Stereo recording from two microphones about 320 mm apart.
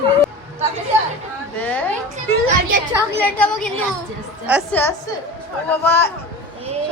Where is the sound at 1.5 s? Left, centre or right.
Centre.